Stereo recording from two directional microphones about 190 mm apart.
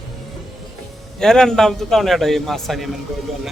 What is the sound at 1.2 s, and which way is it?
Speech, 5° left (ahead or behind).